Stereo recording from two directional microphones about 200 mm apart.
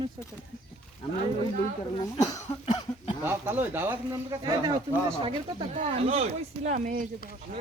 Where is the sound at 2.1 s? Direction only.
20° left (ahead or behind).